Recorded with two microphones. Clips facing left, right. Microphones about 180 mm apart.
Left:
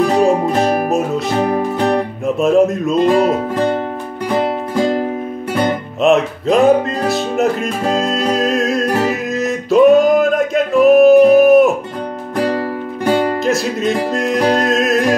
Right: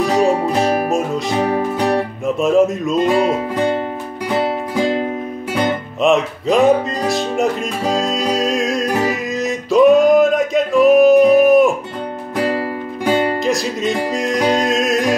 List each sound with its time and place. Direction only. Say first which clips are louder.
0.0 s music: left 2 dB; centre (ahead or behind)
13.1 s music: left 1 dB; centre (ahead or behind)